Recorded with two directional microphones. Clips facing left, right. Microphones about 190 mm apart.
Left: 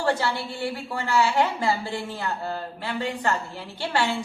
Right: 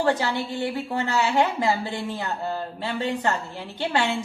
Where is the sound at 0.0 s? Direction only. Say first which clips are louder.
Right 2 dB; 20° right (ahead or behind).